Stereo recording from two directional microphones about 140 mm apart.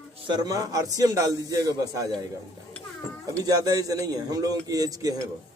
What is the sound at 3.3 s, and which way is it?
A man's voice, 25° right (ahead or behind).